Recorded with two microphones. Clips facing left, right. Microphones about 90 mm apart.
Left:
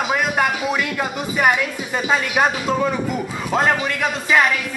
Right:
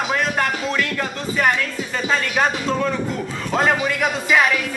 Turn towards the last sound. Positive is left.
turn(degrees=0)  # may be behind; listen again after turning